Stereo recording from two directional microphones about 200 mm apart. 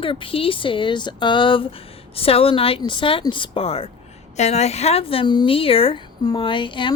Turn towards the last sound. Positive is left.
turn(degrees=25)  # may be behind; listen again after turning